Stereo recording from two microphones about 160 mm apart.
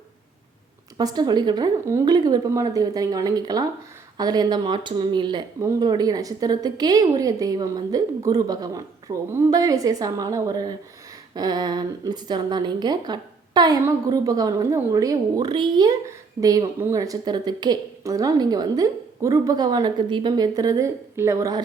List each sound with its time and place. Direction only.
0.9 s a woman's voice: 25° right (ahead or behind)